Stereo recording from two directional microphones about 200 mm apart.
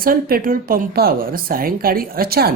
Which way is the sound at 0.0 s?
45° right (ahead or behind).